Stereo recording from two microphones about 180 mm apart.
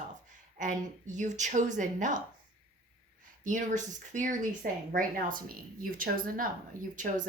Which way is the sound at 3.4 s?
45° right (ahead or behind).